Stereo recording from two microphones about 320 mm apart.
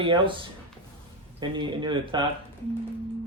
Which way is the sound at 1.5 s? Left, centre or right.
Centre.